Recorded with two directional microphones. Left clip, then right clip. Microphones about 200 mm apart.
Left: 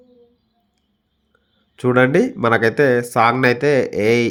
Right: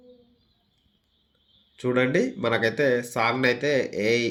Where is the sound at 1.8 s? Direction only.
60° left (ahead or behind).